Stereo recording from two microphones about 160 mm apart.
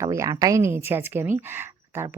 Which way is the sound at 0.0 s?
20° right (ahead or behind).